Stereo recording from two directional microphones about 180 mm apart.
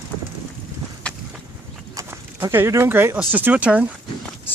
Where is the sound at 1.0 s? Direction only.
5° left (ahead or behind).